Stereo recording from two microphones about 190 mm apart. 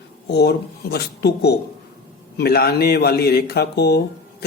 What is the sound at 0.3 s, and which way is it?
A man's voice, 60° left (ahead or behind).